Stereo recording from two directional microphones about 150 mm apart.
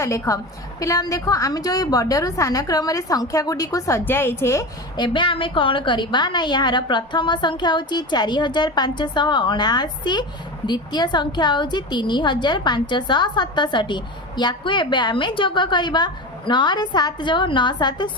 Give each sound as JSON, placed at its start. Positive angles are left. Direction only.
{"t": 0.0, "sound": "a woman's voice", "side_deg": 20}
{"t": 4.9, "sound": "a woman's voice", "side_deg": 30}